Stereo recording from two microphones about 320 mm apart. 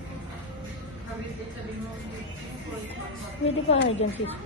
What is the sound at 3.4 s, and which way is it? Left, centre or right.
Speech, left.